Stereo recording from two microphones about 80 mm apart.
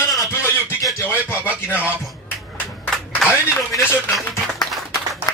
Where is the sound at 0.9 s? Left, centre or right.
Left.